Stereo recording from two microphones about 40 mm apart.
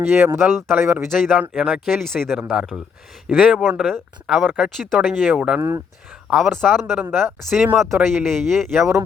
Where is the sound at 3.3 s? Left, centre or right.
Right.